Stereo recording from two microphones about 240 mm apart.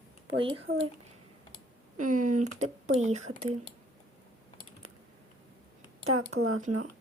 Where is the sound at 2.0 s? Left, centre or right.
Right.